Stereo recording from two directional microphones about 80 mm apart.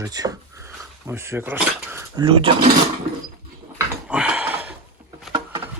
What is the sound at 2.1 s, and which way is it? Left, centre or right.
Speech, right.